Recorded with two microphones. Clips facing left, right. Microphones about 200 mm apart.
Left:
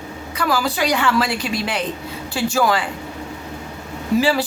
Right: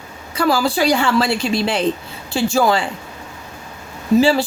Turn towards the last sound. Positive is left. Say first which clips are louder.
# right 4 dB
turn(degrees=-30)  # may be behind; listen again after turning